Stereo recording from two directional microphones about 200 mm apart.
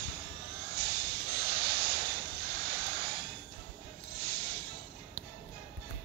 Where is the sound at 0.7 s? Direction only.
50° right (ahead or behind).